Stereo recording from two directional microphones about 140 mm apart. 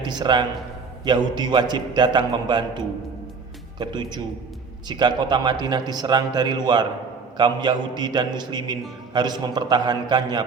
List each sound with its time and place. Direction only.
0.0 s a man's voice: 30° right (ahead or behind)